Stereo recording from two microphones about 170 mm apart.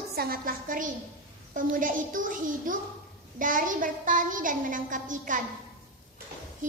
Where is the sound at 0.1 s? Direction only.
60° right (ahead or behind).